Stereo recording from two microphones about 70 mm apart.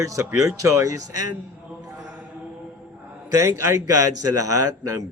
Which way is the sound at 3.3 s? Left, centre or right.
Right.